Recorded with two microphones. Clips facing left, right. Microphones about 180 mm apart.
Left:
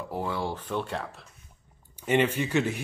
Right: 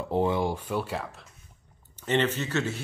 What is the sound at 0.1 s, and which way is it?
Speech, 20° right (ahead or behind).